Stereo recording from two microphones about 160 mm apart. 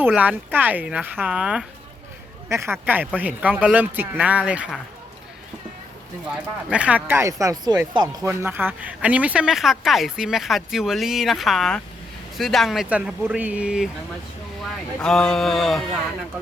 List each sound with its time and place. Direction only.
0.0 s speech: 10° right (ahead or behind)
2.5 s speech: 15° right (ahead or behind)
6.3 s speech: 5° right (ahead or behind)
14.9 s speech: 5° left (ahead or behind)